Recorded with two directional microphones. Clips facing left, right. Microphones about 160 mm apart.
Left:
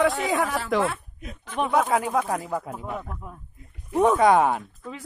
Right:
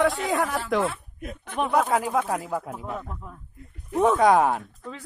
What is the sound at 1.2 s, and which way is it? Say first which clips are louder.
Speech: right 3 dB; 55° right (ahead or behind).